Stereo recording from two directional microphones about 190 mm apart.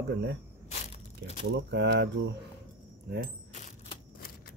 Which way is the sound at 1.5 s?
65° right (ahead or behind).